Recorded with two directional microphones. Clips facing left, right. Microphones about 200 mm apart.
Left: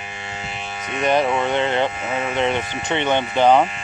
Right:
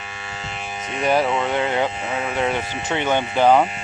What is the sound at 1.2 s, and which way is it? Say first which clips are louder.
Speech: left 1 dB; centre (ahead or behind).